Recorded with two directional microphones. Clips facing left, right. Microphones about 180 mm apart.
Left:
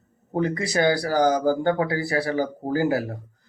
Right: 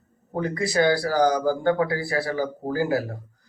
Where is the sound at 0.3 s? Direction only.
20° left (ahead or behind).